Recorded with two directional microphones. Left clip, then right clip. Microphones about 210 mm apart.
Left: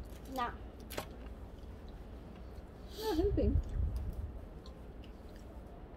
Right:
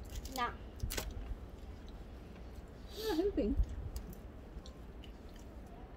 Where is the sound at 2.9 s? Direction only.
25° left (ahead or behind).